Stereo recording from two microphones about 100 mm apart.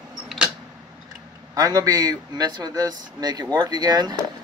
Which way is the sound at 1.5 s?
35° right (ahead or behind).